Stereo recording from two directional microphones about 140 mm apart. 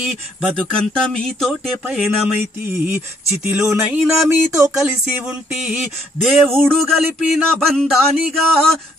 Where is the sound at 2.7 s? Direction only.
15° right (ahead or behind).